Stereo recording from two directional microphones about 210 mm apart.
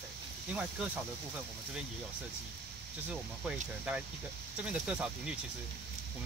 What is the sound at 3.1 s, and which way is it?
Speech, 5° right (ahead or behind).